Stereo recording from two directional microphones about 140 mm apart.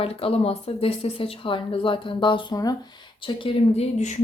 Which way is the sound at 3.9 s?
60° left (ahead or behind).